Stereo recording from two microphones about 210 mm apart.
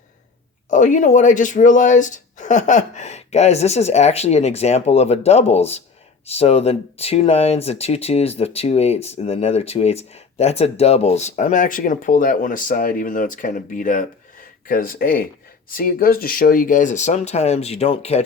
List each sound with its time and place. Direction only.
0.7 s speech: 35° left (ahead or behind)